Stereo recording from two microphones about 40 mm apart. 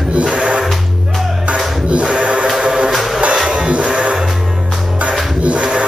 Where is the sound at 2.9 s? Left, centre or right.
Centre.